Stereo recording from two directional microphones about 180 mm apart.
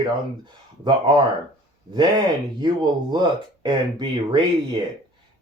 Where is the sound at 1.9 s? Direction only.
25° right (ahead or behind).